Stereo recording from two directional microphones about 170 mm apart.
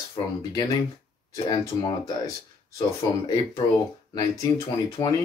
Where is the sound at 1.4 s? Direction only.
25° left (ahead or behind).